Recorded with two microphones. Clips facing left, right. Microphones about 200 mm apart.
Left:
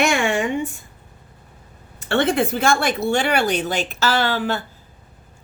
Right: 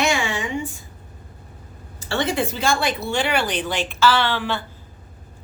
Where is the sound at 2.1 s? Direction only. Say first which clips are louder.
Left 4 dB; 55° left (ahead or behind).